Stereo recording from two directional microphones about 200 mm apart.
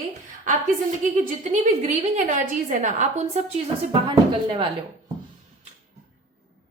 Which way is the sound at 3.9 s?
25° right (ahead or behind).